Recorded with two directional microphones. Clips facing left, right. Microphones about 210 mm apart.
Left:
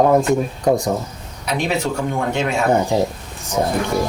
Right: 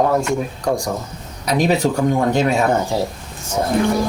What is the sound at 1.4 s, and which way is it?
Speech, 40° right (ahead or behind).